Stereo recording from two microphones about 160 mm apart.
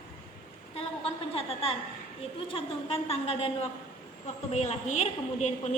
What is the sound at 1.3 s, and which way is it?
A woman's voice, 35° left (ahead or behind).